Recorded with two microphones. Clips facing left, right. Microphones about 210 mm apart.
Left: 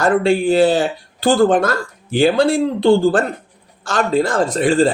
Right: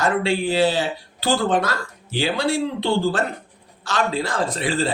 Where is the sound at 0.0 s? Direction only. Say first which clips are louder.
Left 6 dB; 50° left (ahead or behind).